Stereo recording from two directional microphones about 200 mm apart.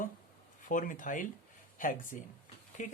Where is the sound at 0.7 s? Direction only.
40° left (ahead or behind).